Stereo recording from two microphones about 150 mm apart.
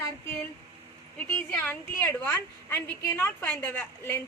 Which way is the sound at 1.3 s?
15° left (ahead or behind).